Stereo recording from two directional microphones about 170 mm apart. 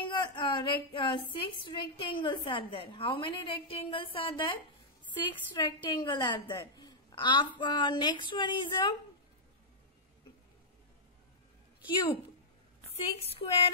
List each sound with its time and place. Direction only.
0.0 s a woman's voice: 30° left (ahead or behind)
12.9 s a woman's voice: 35° left (ahead or behind)